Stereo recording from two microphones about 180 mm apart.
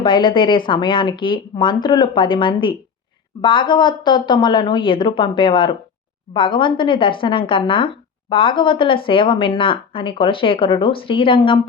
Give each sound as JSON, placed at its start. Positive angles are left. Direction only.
{"t": 0.0, "sound": "speech", "side_deg": 25}